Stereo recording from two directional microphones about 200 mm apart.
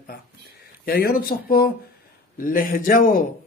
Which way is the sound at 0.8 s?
45° left (ahead or behind).